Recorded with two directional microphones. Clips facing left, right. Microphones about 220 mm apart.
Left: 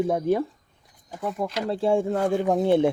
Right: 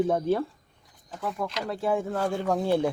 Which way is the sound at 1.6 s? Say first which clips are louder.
Left 6 dB; 30° left (ahead or behind).